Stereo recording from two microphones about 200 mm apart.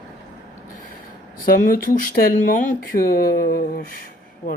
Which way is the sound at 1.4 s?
45° left (ahead or behind).